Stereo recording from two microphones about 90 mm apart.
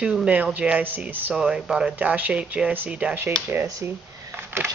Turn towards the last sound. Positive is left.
turn(degrees=-25)  # may be behind; listen again after turning